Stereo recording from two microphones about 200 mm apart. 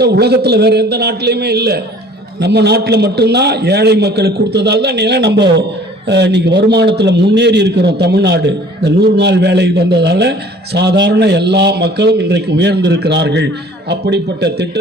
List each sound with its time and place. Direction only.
0.0 s a man's voice: 55° right (ahead or behind)